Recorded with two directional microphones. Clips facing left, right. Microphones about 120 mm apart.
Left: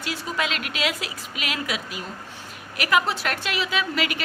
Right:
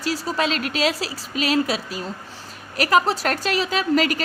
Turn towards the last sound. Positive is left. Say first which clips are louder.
# right 6 dB
turn(degrees=-40)  # may be behind; listen again after turning